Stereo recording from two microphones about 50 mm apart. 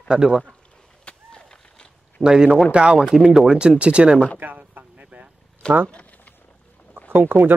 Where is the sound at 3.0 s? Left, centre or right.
Centre.